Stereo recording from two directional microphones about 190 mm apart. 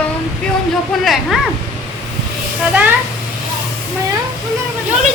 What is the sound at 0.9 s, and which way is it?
Speech, centre (ahead or behind).